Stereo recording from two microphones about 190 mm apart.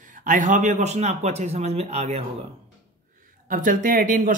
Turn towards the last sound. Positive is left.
turn(degrees=-45)  # may be behind; listen again after turning